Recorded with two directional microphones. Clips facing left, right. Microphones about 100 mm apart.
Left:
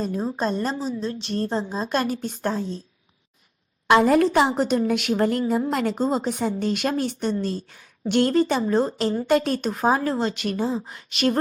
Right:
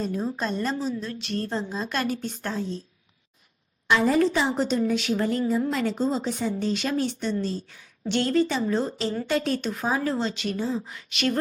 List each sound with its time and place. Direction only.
0.0 s a woman's voice: 35° left (ahead or behind)
3.8 s a woman's voice: 60° left (ahead or behind); by 11.3 s 40° left (ahead or behind)